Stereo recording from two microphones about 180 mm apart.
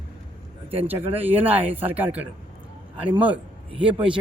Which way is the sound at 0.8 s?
10° right (ahead or behind).